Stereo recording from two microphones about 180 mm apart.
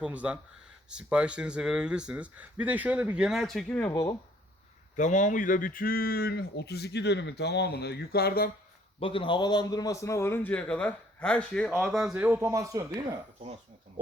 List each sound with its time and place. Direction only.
0.0 s speech: 5° right (ahead or behind); by 4.1 s 15° left (ahead or behind)
4.9 s speech: 45° left (ahead or behind)
9.0 s a man's voice: 30° left (ahead or behind); by 13.1 s 20° right (ahead or behind)
13.4 s speech: 35° right (ahead or behind)